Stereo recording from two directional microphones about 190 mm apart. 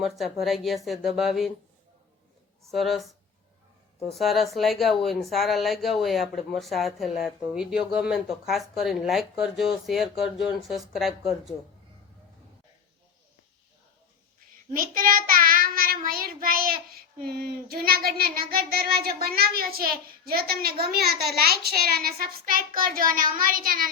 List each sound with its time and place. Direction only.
0.0 s speech: centre (ahead or behind)
2.6 s speech: centre (ahead or behind)
4.1 s speech: centre (ahead or behind)
14.7 s child singing: 50° right (ahead or behind)